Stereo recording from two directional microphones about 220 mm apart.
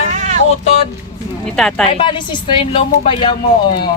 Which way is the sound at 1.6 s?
Centre (ahead or behind).